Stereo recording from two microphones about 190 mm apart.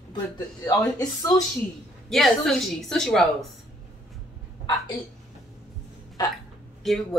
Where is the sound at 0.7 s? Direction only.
20° left (ahead or behind).